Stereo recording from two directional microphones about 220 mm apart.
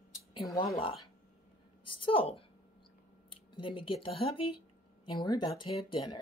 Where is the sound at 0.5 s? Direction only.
20° left (ahead or behind).